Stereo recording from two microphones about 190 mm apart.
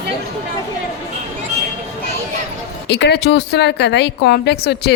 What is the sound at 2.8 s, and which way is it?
A woman's voice, 65° left (ahead or behind).